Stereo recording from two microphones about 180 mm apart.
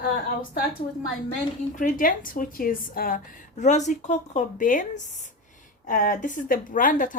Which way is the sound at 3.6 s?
40° left (ahead or behind).